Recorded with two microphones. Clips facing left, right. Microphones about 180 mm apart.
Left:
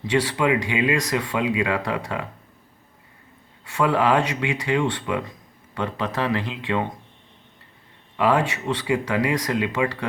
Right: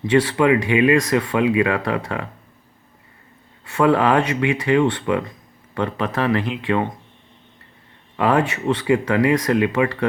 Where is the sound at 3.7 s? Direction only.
60° right (ahead or behind).